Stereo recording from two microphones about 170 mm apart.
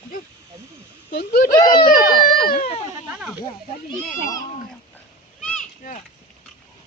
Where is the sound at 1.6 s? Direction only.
25° left (ahead or behind).